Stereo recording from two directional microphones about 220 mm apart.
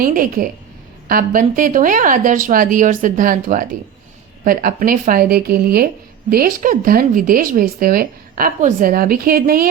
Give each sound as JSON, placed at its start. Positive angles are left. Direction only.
{"t": 0.0, "sound": "speech", "side_deg": -40}